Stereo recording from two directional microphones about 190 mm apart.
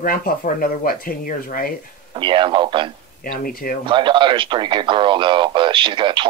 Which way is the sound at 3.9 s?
25° right (ahead or behind).